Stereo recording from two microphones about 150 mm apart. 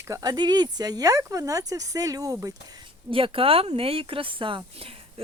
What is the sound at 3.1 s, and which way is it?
Speech, 35° right (ahead or behind).